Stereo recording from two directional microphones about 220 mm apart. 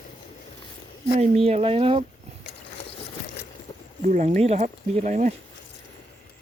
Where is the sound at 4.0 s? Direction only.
35° right (ahead or behind).